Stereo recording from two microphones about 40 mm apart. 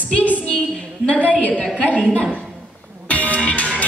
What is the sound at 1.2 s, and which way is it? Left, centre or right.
Speech, left.